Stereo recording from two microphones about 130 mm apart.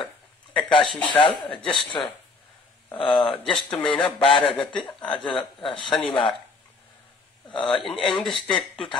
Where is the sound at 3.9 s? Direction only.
40° left (ahead or behind).